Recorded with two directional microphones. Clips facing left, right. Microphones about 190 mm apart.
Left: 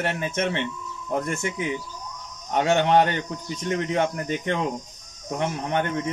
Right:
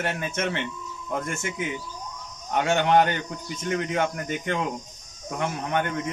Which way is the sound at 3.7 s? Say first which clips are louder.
Left 2 dB; 30° left (ahead or behind).